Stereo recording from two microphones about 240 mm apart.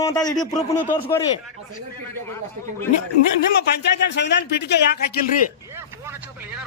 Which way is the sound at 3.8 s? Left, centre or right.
Left.